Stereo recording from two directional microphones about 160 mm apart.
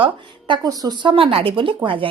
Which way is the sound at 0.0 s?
30° right (ahead or behind).